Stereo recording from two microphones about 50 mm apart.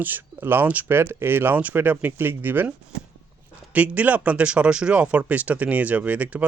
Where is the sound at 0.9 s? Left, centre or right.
Right.